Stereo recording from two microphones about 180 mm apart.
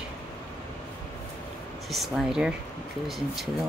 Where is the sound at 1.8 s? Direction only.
Centre (ahead or behind).